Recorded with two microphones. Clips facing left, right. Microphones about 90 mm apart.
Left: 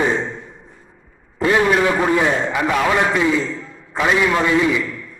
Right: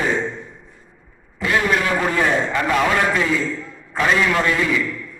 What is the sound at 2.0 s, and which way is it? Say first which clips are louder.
A man's voice: left 2 dB; 15° left (ahead or behind).